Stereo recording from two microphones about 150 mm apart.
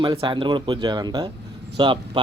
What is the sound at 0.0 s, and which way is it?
Speech, 30° right (ahead or behind).